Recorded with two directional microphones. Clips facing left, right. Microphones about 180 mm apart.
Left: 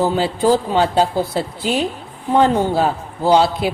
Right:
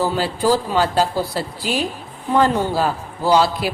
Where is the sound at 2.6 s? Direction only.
20° left (ahead or behind).